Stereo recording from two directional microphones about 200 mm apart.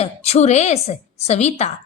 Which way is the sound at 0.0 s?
35° left (ahead or behind).